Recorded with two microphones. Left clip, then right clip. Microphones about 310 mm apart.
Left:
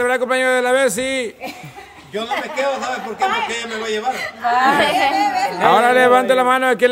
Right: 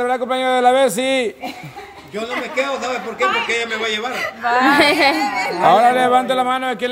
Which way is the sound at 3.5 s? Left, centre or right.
Centre.